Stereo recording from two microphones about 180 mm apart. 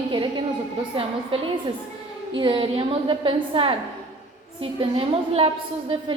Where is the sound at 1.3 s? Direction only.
30° right (ahead or behind).